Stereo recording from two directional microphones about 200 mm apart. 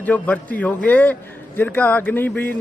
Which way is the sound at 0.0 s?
10° left (ahead or behind).